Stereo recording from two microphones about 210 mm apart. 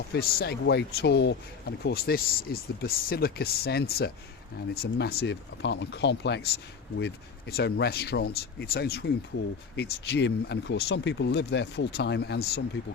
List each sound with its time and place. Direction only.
0.1 s speech: 50° left (ahead or behind)